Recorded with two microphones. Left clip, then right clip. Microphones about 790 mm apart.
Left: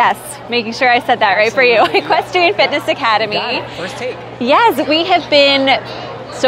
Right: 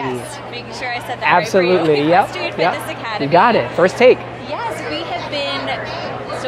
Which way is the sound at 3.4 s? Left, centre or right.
Right.